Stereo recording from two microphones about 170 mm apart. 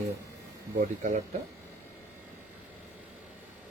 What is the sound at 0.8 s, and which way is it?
Speech, 50° right (ahead or behind).